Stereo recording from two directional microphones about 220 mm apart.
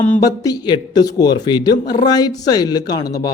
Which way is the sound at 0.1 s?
15° left (ahead or behind).